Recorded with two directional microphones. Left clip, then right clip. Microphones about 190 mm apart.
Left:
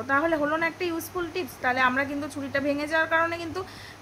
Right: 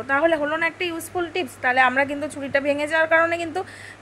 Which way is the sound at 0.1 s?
15° right (ahead or behind).